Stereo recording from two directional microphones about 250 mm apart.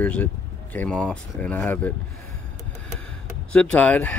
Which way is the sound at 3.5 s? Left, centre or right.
Centre.